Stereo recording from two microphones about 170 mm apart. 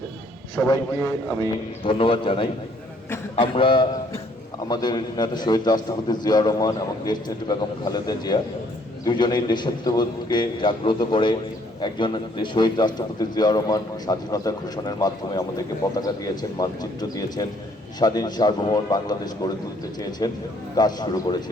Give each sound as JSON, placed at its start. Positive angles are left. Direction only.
{"t": 0.5, "sound": "a man's voice", "side_deg": 20}
{"t": 1.8, "sound": "a man's voice", "side_deg": 30}